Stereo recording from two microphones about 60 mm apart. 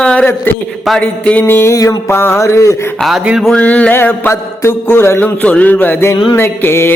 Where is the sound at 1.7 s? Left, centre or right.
Left.